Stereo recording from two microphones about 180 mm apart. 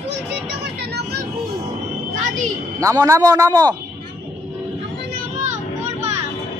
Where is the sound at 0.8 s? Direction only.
65° right (ahead or behind).